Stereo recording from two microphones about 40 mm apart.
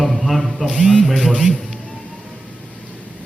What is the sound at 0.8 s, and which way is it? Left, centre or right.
Speech, right.